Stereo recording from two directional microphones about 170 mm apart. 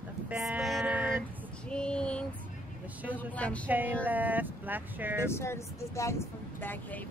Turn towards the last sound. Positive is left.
turn(degrees=10)  # may be behind; listen again after turning